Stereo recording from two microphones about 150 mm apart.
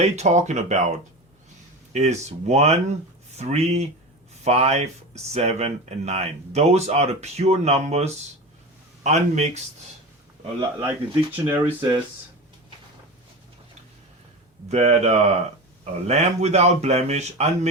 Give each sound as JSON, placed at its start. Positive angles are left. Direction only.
{"t": 0.0, "sound": "speech", "side_deg": -50}
{"t": 10.8, "sound": "speech", "side_deg": -10}
{"t": 14.7, "sound": "speech", "side_deg": -45}